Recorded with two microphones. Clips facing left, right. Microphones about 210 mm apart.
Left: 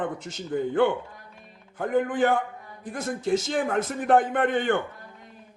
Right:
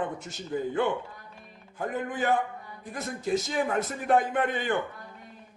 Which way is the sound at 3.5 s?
50° left (ahead or behind).